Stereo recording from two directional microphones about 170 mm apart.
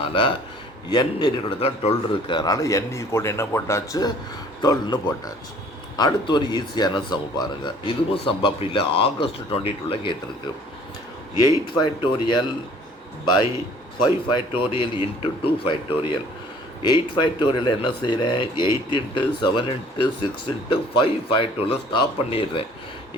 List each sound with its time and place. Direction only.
0.0 s a man's voice: 30° left (ahead or behind)
11.4 s a man's voice: 25° left (ahead or behind)
14.3 s a man's voice: 30° left (ahead or behind)